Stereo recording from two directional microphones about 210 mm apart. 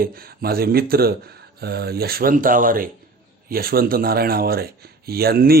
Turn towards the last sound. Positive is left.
turn(degrees=-45)  # may be behind; listen again after turning